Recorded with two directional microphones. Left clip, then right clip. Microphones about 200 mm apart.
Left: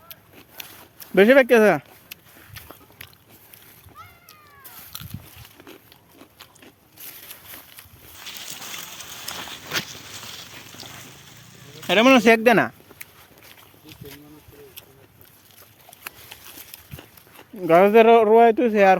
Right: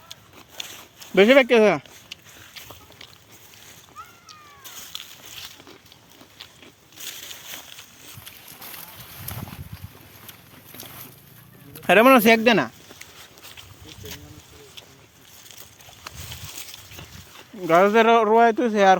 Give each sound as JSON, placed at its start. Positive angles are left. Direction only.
{"t": 0.6, "sound": "a sound", "side_deg": 25}
{"t": 0.9, "sound": "speech", "side_deg": 25}
{"t": 11.9, "sound": "speech", "side_deg": -40}
{"t": 12.2, "sound": "speech", "side_deg": 40}
{"t": 17.0, "sound": "speech", "side_deg": 30}